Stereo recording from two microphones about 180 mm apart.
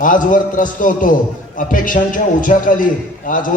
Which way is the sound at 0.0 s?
50° left (ahead or behind).